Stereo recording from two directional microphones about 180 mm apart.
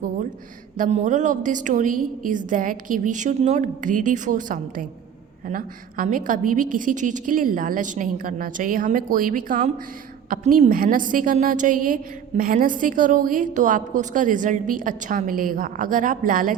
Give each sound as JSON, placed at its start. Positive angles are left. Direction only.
{"t": 0.8, "sound": "a woman's voice", "side_deg": -40}